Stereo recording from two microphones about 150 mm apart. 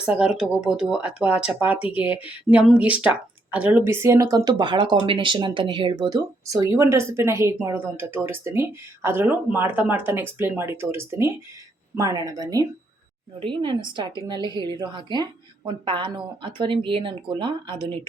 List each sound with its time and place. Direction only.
0.0 s a woman's voice: 5° right (ahead or behind); by 17.8 s 30° right (ahead or behind)